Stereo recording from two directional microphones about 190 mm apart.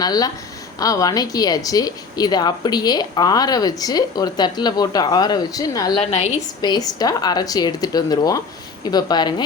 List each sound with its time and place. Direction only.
0.0 s a woman's voice: 20° left (ahead or behind)
6.0 s a woman's voice: 35° left (ahead or behind)
6.6 s a woman's voice: 20° left (ahead or behind)